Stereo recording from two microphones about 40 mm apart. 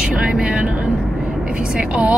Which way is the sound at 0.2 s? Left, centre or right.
Right.